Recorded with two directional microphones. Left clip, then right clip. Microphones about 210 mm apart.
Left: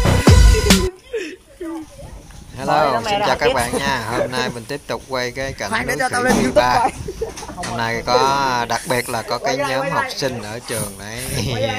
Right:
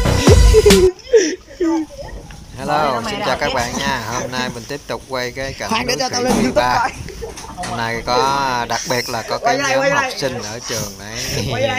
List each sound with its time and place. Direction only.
0.0 s music: centre (ahead or behind)
1.1 s a sound: 30° right (ahead or behind)
2.6 s speech: centre (ahead or behind)